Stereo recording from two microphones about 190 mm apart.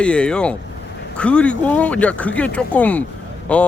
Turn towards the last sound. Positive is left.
turn(degrees=5)  # may be behind; listen again after turning